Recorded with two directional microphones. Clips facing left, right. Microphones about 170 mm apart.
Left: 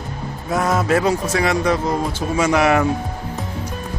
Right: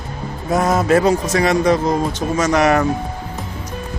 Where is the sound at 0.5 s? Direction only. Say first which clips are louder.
Right 2 dB; 20° right (ahead or behind).